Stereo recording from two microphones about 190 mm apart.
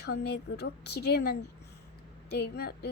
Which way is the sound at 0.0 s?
60° left (ahead or behind).